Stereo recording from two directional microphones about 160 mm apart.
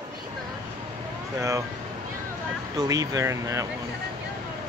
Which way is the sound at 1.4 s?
20° right (ahead or behind).